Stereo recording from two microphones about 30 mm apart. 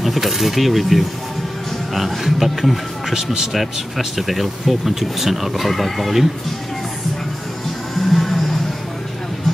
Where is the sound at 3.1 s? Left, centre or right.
Centre.